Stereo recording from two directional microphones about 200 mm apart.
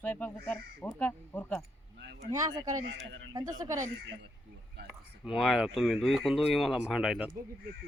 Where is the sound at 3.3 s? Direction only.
20° right (ahead or behind).